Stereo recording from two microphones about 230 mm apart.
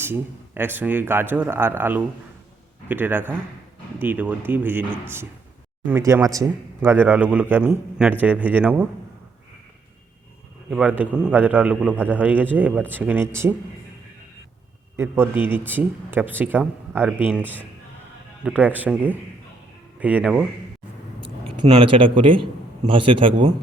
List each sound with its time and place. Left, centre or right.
0.0 s speech: centre
10.7 s speech: centre
14.9 s speech: centre
21.6 s a man's voice: right